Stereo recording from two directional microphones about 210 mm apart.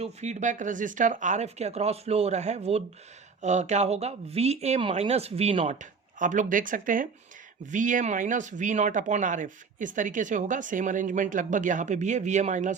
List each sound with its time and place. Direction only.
0.0 s speech: 35° right (ahead or behind)